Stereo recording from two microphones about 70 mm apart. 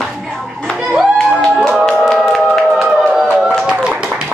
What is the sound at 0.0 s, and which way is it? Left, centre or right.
Clapping, centre.